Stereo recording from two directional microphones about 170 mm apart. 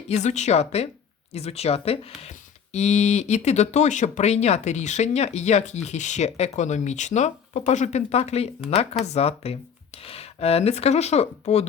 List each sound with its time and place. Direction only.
0.1 s speech: 40° left (ahead or behind)